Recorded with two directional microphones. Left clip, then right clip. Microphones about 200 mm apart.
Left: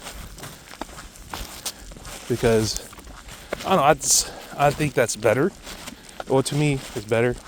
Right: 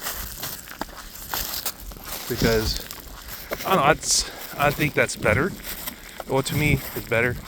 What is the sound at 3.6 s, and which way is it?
Speech, 55° left (ahead or behind).